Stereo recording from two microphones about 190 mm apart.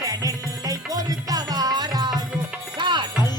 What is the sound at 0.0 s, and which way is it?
Music, 20° right (ahead or behind).